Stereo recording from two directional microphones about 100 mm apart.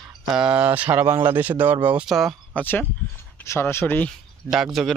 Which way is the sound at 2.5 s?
15° left (ahead or behind).